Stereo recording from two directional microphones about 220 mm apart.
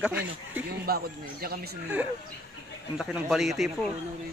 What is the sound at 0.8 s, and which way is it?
Speech, 45° right (ahead or behind).